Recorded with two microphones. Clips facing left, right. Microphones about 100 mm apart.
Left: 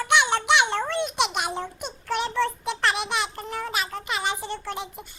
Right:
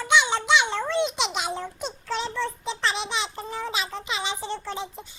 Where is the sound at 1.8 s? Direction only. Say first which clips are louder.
Left 3 dB; 60° left (ahead or behind).